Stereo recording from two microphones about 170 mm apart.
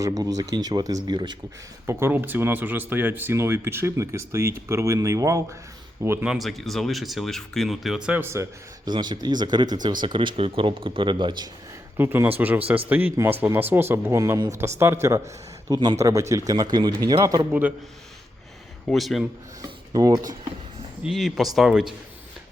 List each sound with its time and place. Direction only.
0.0 s speech: 20° right (ahead or behind)
1.9 s speech: 15° right (ahead or behind)
6.2 s speech: centre (ahead or behind); by 11.4 s 25° right (ahead or behind)
11.9 s speech: 10° right (ahead or behind)
17.5 s speech: 10° right (ahead or behind)
18.9 s speech: centre (ahead or behind)
19.9 s speech: 20° right (ahead or behind)
21.0 s speech: centre (ahead or behind)